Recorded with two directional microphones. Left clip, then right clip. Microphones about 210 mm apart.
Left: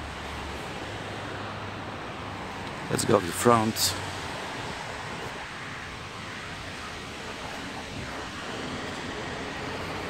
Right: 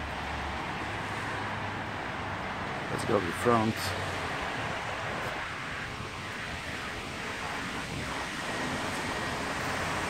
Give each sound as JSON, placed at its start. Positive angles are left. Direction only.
{"t": 3.0, "sound": "speech", "side_deg": 50}